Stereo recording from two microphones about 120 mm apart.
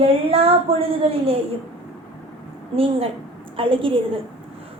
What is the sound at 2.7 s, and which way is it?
Speech, 50° right (ahead or behind).